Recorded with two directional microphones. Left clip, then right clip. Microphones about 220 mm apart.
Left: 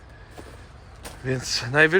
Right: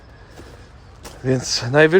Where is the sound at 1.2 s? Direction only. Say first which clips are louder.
Right 6 dB; 30° right (ahead or behind).